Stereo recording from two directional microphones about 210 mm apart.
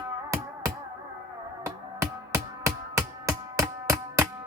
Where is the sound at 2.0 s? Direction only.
15° right (ahead or behind).